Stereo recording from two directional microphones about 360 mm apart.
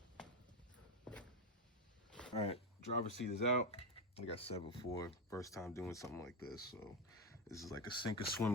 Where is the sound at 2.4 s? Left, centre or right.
Centre.